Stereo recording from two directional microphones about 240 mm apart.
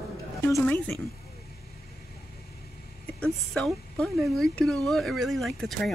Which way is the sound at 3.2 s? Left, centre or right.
Centre.